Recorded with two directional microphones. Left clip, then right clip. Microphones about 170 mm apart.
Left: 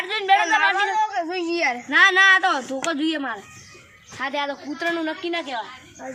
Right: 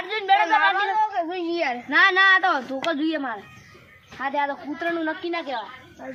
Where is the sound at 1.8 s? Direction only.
15° left (ahead or behind).